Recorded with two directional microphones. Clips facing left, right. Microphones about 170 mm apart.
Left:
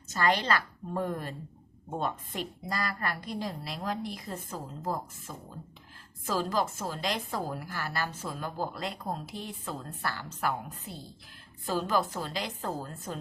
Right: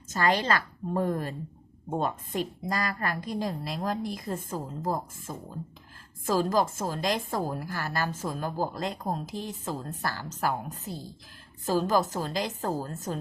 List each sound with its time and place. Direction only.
0.1 s a woman's voice: 40° right (ahead or behind)